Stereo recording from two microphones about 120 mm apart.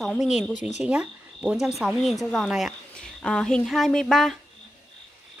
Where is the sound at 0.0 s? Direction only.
Centre (ahead or behind).